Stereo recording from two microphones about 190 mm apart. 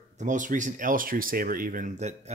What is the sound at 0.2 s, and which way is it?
Speech, 40° right (ahead or behind).